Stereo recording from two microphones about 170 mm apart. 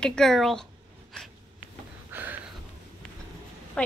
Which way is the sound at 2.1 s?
10° right (ahead or behind).